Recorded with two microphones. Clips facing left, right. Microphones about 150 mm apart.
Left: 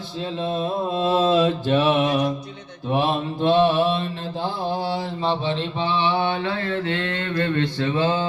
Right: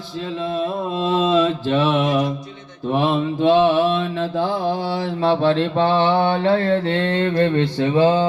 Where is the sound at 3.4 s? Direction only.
90° right; by 4.4 s 70° right (ahead or behind).